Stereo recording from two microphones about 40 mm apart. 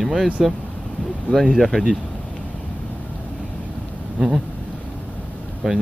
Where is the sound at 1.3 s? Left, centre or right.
Centre.